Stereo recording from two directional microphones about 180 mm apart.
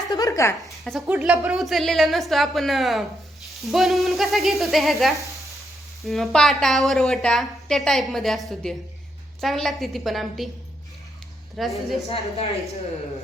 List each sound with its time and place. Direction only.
0.1 s a woman's voice: 20° left (ahead or behind)
0.6 s a woman's voice: centre (ahead or behind)
11.5 s a woman's voice: centre (ahead or behind)